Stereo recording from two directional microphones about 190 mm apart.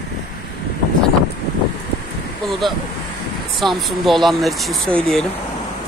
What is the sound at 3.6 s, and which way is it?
Speech, centre (ahead or behind).